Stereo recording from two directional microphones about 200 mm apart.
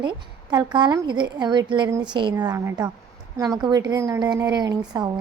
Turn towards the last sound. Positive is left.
turn(degrees=-20)  # may be behind; listen again after turning